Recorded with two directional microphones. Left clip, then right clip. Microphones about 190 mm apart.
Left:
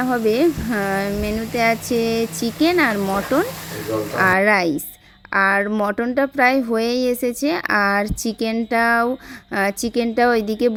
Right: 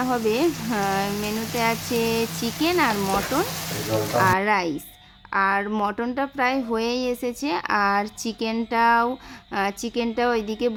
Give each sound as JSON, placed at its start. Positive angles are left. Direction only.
{"t": 0.0, "sound": "speech", "side_deg": 20}
{"t": 4.2, "sound": "speech", "side_deg": 25}